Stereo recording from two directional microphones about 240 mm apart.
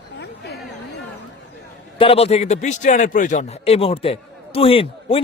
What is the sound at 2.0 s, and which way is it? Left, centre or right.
A man's voice, left.